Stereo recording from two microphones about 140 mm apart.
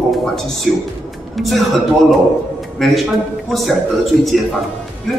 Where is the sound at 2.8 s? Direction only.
Centre (ahead or behind).